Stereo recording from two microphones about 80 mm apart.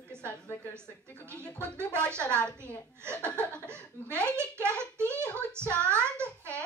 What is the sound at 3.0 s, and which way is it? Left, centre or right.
Speech, right.